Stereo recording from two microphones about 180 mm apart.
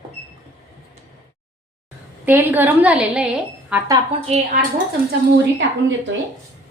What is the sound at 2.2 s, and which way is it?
A woman's voice, 10° right (ahead or behind).